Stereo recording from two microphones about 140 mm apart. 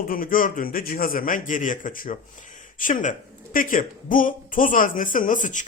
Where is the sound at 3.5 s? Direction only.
80° left.